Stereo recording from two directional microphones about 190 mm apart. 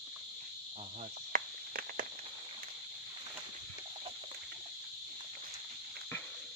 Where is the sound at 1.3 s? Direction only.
50° right (ahead or behind).